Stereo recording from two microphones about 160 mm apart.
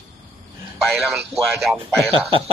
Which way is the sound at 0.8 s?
Centre (ahead or behind).